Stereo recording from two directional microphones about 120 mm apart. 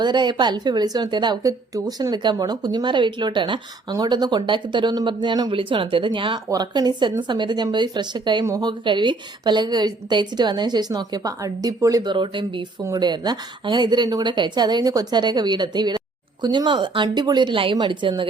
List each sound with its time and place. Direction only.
0.0 s a woman's voice: 40° right (ahead or behind)
8.4 s a woman's voice: 30° right (ahead or behind)
8.8 s a woman's voice: 40° right (ahead or behind)
12.1 s speech: 40° right (ahead or behind)
12.8 s a woman's voice: 30° right (ahead or behind)